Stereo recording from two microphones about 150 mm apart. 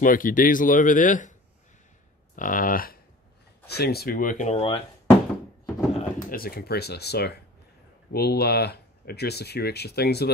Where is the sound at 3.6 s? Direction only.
90° left; by 4.5 s 65° left (ahead or behind).